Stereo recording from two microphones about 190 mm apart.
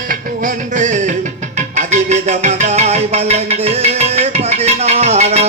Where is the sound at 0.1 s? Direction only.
40° right (ahead or behind).